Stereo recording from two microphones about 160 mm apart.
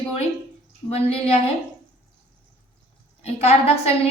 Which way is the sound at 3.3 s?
40° left (ahead or behind).